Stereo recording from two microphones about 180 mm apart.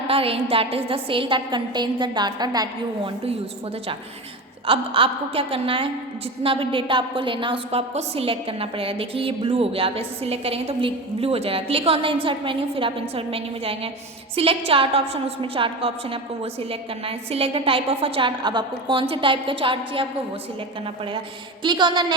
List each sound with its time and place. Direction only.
0.1 s a woman's voice: 30° right (ahead or behind)
4.6 s a woman's voice: 30° right (ahead or behind)